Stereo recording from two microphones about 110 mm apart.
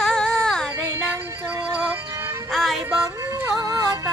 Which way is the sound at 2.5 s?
5° left (ahead or behind).